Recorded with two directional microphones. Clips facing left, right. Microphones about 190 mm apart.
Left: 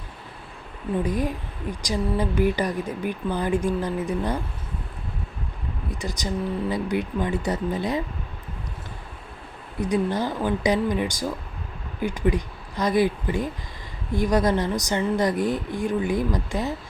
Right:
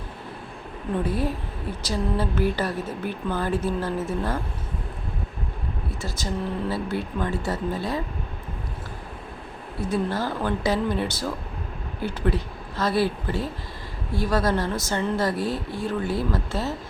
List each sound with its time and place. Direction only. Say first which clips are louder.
1.0 s speech: even; 15° left (ahead or behind)
5.9 s speech: left 2 dB; 15° left (ahead or behind)
9.8 s speech: left 2 dB; 15° left (ahead or behind)